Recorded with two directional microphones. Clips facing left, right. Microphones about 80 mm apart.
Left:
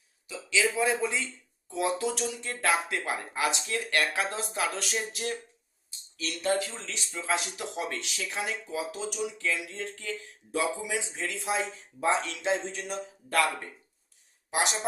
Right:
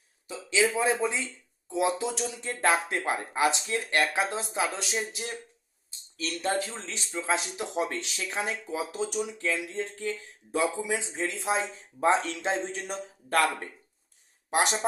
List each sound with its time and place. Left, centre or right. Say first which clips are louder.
0.3 s speech: right 2 dB; right
6.1 s speech: even; right
14.5 s speech: right 3 dB; right